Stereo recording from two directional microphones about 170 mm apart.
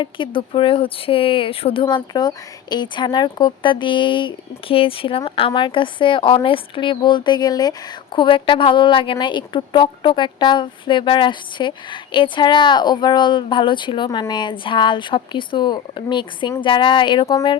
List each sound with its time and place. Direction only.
0.0 s speech: 30° left (ahead or behind)